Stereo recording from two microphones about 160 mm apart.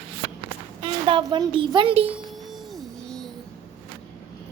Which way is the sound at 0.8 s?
30° right (ahead or behind).